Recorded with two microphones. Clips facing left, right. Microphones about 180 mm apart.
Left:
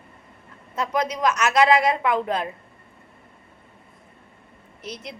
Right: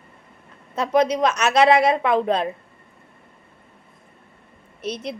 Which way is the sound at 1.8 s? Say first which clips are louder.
Right 3 dB; 25° right (ahead or behind).